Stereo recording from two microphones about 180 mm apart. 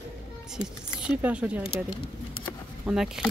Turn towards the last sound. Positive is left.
turn(degrees=-5)  # may be behind; listen again after turning